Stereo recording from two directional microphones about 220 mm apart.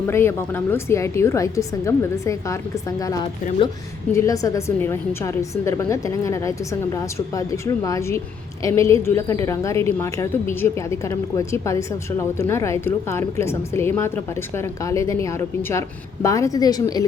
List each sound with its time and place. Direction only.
0.1 s a woman's voice: 10° left (ahead or behind)